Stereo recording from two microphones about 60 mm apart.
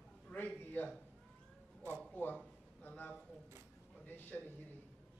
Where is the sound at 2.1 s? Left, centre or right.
Left.